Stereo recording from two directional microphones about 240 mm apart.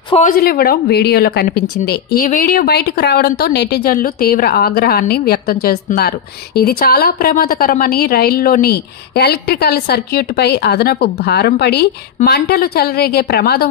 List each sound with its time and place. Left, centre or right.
0.1 s a woman's voice: left